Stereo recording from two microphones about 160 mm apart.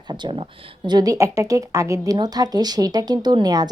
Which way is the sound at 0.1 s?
30° right (ahead or behind).